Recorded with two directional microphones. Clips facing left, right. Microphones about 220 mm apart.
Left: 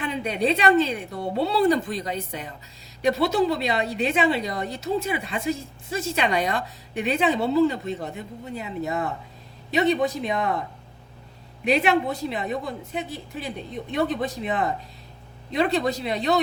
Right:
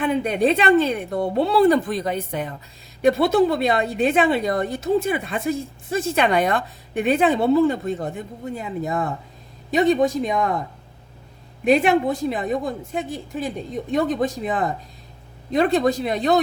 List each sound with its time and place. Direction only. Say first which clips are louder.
0.0 s a woman's voice: right 5 dB; 55° right (ahead or behind)
11.6 s a woman's voice: right 4 dB; 50° right (ahead or behind)